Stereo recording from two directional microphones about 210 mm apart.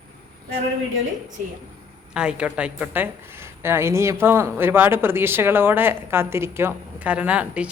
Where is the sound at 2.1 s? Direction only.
5° right (ahead or behind).